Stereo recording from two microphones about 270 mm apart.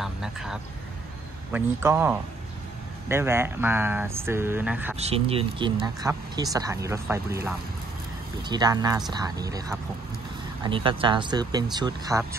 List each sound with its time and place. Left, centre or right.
0.0 s speech: centre
4.9 s speech: right